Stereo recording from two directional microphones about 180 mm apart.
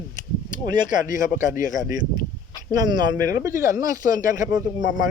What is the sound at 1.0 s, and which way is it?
Speech, 45° left (ahead or behind).